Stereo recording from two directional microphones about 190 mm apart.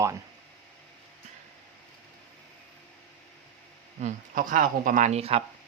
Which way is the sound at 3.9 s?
45° right (ahead or behind).